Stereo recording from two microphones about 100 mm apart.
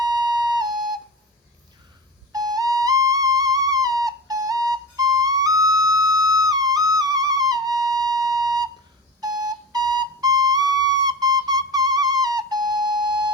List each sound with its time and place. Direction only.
0.0 s flute: 40° right (ahead or behind)
2.3 s theremin: 40° right (ahead or behind)
9.2 s flute: 40° right (ahead or behind)